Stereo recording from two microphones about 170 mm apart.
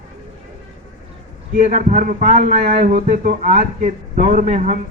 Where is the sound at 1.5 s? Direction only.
45° right (ahead or behind).